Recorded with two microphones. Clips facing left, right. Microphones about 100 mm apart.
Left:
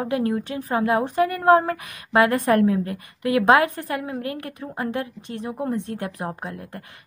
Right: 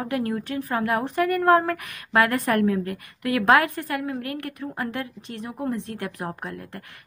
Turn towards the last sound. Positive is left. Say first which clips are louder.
# left 1 dB
turn(degrees=25)  # may be behind; listen again after turning